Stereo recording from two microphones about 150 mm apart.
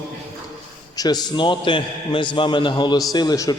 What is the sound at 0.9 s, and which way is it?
A man's voice, 25° left (ahead or behind).